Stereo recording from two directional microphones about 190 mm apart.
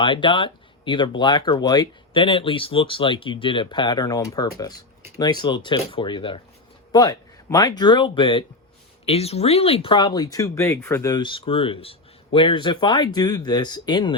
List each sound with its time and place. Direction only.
0.0 s speech: 25° left (ahead or behind)